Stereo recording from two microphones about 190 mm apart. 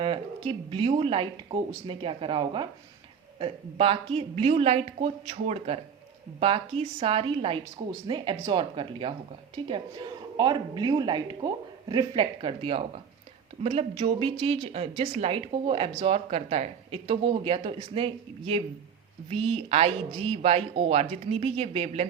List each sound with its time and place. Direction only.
0.0 s speech: 30° right (ahead or behind)